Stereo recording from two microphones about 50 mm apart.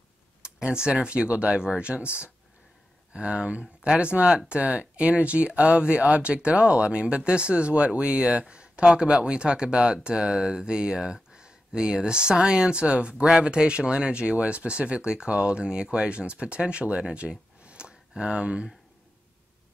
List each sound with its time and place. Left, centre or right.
0.4 s speech: centre
3.1 s speech: centre